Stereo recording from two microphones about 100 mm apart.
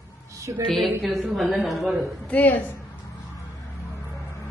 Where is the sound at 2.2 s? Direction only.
15° left (ahead or behind).